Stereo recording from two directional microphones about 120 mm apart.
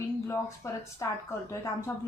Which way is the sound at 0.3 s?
25° left (ahead or behind).